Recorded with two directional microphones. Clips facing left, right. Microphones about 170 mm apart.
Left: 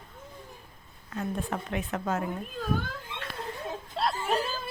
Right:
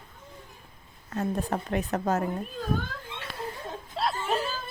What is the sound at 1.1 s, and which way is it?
A woman's voice, 40° right (ahead or behind).